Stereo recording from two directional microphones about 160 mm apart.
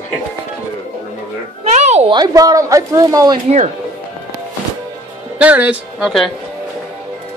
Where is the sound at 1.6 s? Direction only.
45° right (ahead or behind).